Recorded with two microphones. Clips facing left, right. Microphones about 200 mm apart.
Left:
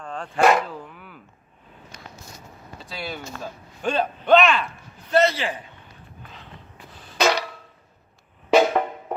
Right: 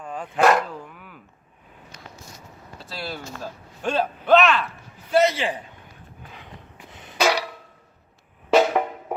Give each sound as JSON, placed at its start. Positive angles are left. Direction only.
{"t": 0.0, "sound": "speech", "side_deg": -5}
{"t": 2.7, "sound": "speech", "side_deg": 0}
{"t": 5.0, "sound": "a man's voice", "side_deg": -10}
{"t": 6.3, "sound": "a sound", "side_deg": -15}
{"t": 7.2, "sound": "drum", "side_deg": -10}
{"t": 8.7, "sound": "music", "side_deg": -5}